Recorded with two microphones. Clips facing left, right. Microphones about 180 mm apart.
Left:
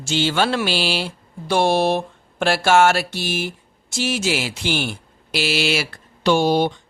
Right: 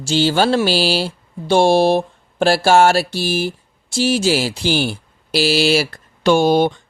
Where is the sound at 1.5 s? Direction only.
30° right (ahead or behind).